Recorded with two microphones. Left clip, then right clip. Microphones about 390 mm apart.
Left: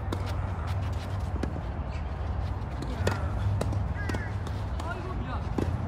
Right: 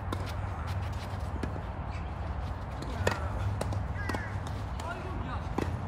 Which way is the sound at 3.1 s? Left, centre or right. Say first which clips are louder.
Right 1 dB; right.